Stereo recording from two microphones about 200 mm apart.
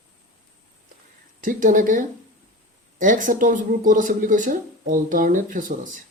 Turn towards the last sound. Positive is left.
turn(degrees=-40)  # may be behind; listen again after turning